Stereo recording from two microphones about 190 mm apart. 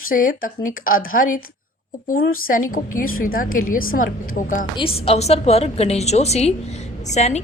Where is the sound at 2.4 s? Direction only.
45° left (ahead or behind).